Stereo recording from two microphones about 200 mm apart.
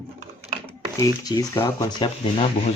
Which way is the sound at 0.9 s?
15° left (ahead or behind).